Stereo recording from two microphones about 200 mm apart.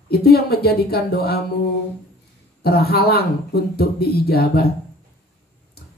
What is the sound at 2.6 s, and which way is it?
A woman's voice, 50° left (ahead or behind).